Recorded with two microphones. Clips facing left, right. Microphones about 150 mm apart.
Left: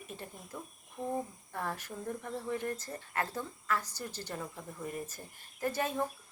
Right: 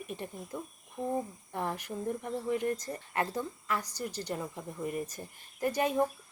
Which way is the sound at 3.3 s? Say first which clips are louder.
Right 2 dB; 15° right (ahead or behind).